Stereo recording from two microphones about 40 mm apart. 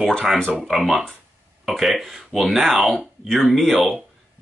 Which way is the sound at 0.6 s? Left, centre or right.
Centre.